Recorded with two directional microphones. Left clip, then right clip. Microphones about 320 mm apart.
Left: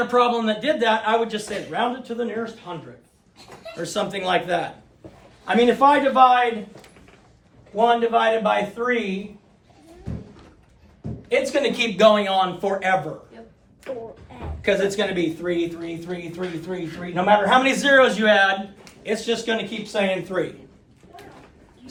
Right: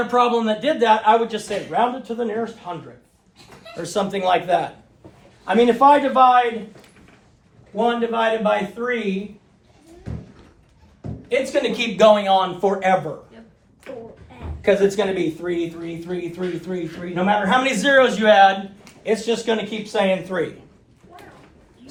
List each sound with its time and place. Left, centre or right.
0.1 s a man's voice: centre
3.8 s a man's voice: centre
7.8 s speech: centre
11.3 s speech: centre
14.6 s a man's voice: centre
15.4 s speech: centre
19.0 s a man's voice: centre